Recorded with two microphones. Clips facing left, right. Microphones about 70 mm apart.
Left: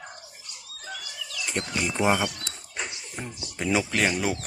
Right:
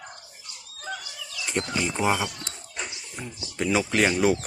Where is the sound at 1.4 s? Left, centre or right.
Centre.